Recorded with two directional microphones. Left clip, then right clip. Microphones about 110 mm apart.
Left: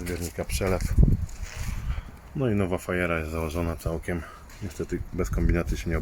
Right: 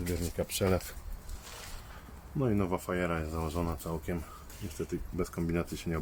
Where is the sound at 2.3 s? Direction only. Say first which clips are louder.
Left 5 dB; 10° left (ahead or behind).